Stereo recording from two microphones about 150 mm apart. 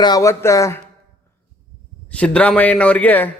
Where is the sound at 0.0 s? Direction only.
25° left (ahead or behind).